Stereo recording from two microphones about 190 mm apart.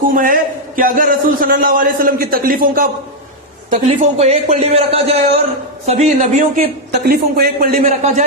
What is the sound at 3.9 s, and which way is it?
A man's voice, 35° right (ahead or behind).